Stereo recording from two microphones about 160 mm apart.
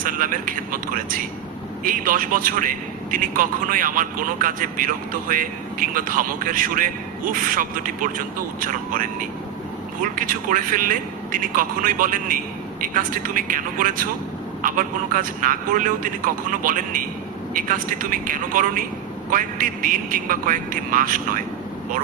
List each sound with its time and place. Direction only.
0.0 s a man's voice: 55° right (ahead or behind)